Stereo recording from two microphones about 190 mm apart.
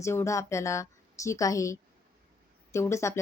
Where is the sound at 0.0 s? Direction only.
15° left (ahead or behind).